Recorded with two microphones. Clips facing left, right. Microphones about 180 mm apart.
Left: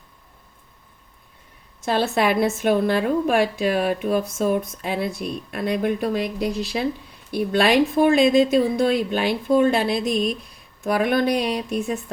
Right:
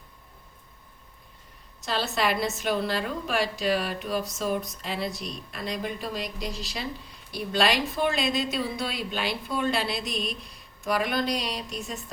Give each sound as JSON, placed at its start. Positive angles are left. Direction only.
{"t": 1.8, "sound": "a woman's voice", "side_deg": 55}